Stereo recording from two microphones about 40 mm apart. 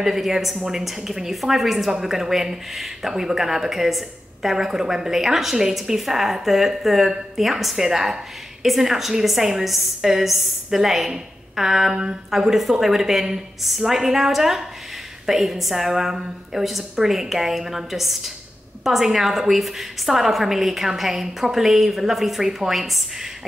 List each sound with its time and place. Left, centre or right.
0.0 s a woman's voice: centre